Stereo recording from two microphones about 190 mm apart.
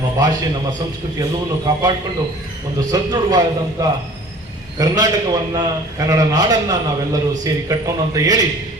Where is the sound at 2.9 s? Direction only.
20° right (ahead or behind).